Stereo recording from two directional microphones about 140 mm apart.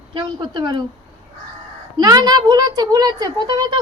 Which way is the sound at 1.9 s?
30° right (ahead or behind).